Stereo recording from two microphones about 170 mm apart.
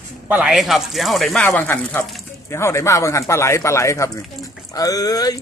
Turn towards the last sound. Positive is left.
turn(degrees=20)  # may be behind; listen again after turning